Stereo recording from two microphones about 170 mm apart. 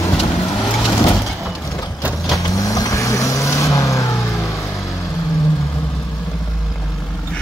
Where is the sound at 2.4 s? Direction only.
20° left (ahead or behind).